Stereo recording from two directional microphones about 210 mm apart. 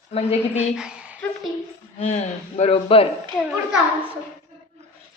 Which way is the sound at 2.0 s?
30° left (ahead or behind).